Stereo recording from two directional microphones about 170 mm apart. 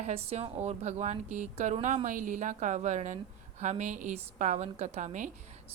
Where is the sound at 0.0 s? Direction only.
35° right (ahead or behind).